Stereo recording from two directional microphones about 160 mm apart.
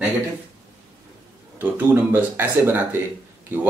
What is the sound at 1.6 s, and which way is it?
Speech, 10° right (ahead or behind).